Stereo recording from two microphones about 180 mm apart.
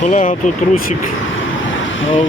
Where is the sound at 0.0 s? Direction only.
40° left (ahead or behind).